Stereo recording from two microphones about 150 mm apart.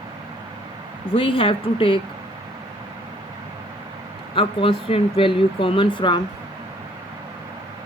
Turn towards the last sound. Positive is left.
turn(degrees=30)  # may be behind; listen again after turning